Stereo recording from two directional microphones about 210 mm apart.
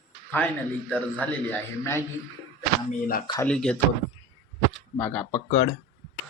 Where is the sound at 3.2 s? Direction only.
15° left (ahead or behind).